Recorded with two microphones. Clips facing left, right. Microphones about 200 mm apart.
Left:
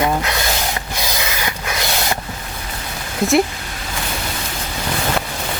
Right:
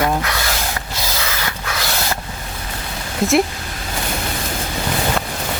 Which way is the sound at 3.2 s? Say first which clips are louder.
Even; centre (ahead or behind).